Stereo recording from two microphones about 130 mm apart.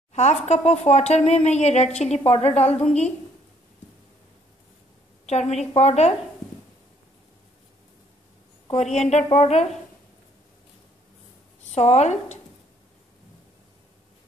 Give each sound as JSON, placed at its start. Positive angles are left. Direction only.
{"t": 0.1, "sound": "speech", "side_deg": 60}
{"t": 5.2, "sound": "a woman's voice", "side_deg": 55}
{"t": 8.9, "sound": "speech", "side_deg": 55}
{"t": 11.7, "sound": "speech", "side_deg": 55}